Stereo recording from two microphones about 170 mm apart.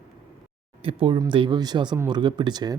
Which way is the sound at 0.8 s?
30° right (ahead or behind).